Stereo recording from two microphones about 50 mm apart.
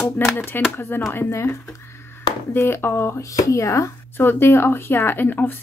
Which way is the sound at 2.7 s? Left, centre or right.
Left.